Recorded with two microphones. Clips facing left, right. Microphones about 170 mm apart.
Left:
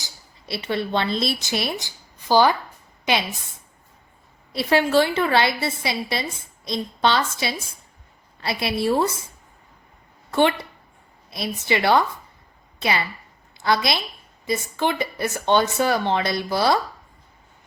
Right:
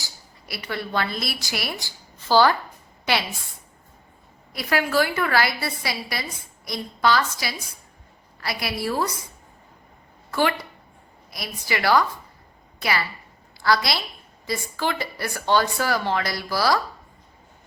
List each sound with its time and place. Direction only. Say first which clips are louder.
0.0 s a woman's voice: even; 25° left (ahead or behind)
4.5 s a woman's voice: left 4 dB; 25° left (ahead or behind)
10.3 s a woman's voice: left 4 dB; 25° left (ahead or behind)